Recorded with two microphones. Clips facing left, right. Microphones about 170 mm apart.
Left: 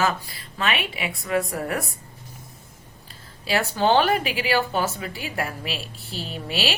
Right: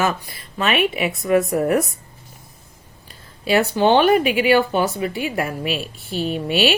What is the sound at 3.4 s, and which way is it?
Speech, 20° right (ahead or behind).